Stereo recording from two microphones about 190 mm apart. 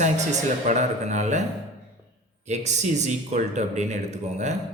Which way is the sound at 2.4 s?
35° right (ahead or behind).